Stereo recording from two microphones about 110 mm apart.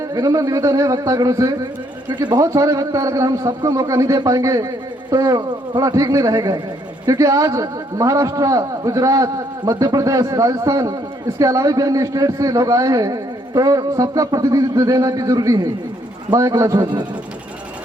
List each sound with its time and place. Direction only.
0.1 s a man's voice: 35° right (ahead or behind)